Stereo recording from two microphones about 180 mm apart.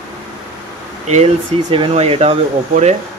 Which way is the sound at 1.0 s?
40° right (ahead or behind).